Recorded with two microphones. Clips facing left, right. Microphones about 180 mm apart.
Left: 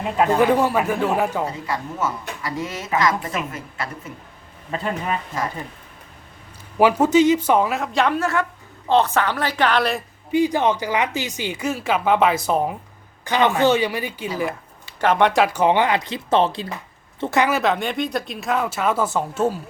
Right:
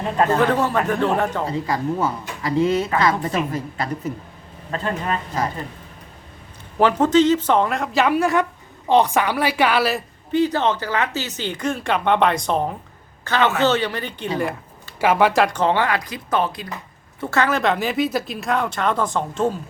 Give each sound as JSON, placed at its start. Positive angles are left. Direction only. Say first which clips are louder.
{"t": 0.0, "sound": "speech", "louder": "left 1 dB", "side_deg": 10}
{"t": 1.5, "sound": "a woman's voice", "louder": "right 5 dB", "side_deg": -35}
{"t": 4.7, "sound": "speech", "louder": "right 1 dB", "side_deg": 10}
{"t": 6.7, "sound": "a woman's voice", "louder": "even", "side_deg": 10}
{"t": 10.3, "sound": "speech", "louder": "left 1 dB", "side_deg": 10}
{"t": 15.0, "sound": "speech", "louder": "even", "side_deg": -5}
{"t": 17.2, "sound": "speech", "louder": "left 1 dB", "side_deg": 15}
{"t": 17.6, "sound": "speech", "louder": "right 1 dB", "side_deg": 0}